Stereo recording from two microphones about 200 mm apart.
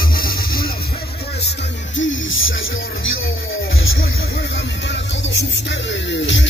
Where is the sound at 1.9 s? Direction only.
75° left (ahead or behind).